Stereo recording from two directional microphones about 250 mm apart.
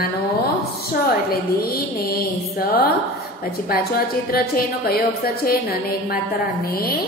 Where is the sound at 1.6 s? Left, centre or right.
Left.